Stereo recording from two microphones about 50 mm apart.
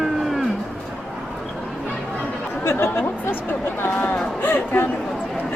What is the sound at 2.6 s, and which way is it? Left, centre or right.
Speech, left.